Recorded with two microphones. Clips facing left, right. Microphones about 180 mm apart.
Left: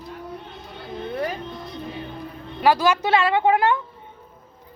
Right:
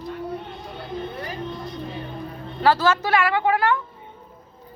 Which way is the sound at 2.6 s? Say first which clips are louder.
Left 1 dB; 15° left (ahead or behind).